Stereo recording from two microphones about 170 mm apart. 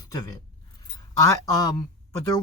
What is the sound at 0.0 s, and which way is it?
Speech, 20° left (ahead or behind).